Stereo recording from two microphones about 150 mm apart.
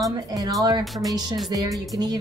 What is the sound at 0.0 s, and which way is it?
Speech, 25° right (ahead or behind).